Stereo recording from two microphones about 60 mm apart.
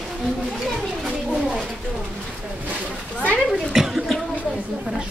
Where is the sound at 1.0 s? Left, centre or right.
Centre.